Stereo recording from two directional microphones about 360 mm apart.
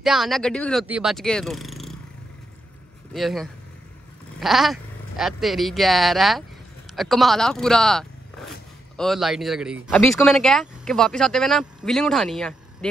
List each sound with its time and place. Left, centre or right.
0.0 s speech: centre
3.1 s speech: centre